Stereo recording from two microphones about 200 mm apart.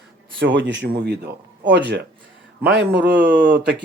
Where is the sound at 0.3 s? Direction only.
65° right (ahead or behind).